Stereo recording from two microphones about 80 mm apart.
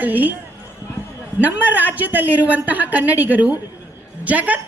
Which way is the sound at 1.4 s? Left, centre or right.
Right.